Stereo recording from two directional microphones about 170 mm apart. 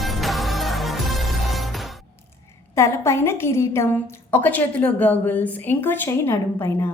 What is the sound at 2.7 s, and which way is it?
A woman's voice, 15° left (ahead or behind).